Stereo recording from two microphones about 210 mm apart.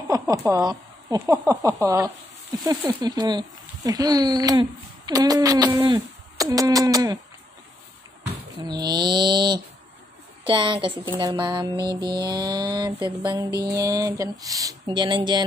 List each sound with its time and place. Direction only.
0.1 s speech: 15° right (ahead or behind)
8.6 s a sound: 20° right (ahead or behind)
13.7 s speech: 15° right (ahead or behind)